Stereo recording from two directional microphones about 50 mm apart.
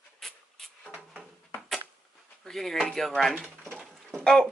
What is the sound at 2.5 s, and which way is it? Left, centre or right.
Speech, centre.